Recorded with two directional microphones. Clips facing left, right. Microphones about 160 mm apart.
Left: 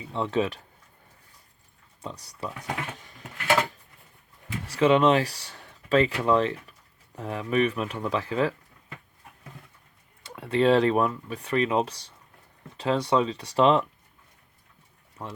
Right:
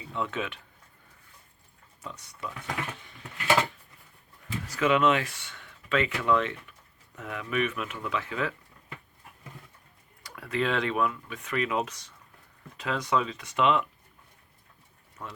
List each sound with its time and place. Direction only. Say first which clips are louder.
0.1 s speech: left 6 dB; 30° left (ahead or behind)
2.0 s a sound: left 4 dB; 35° left (ahead or behind)
4.6 s speech: left 4 dB; 30° left (ahead or behind)
10.2 s speech: left 8 dB; 25° left (ahead or behind)
15.2 s speech: left 4 dB; 25° left (ahead or behind)